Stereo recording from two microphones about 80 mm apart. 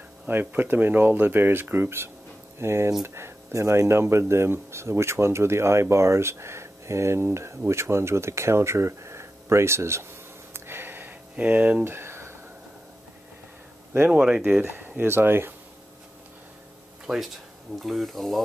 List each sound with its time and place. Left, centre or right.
0.3 s speech: right
10.5 s a sound: right
11.8 s a sound: right
14.1 s speech: centre
14.6 s speech: right
17.0 s speech: centre